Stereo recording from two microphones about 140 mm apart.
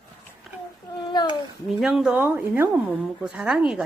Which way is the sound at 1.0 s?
35° left (ahead or behind).